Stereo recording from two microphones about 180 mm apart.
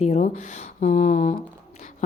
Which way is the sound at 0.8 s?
45° left (ahead or behind).